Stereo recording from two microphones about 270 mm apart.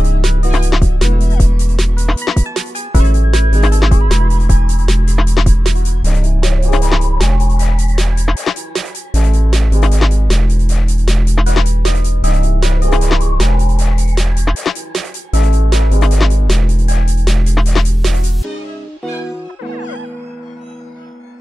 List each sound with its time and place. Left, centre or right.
0.2 s music: centre